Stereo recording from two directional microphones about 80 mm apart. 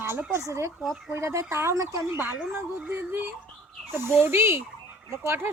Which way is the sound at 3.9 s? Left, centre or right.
Right.